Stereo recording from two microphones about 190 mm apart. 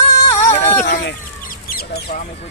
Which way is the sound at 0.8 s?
65° left (ahead or behind).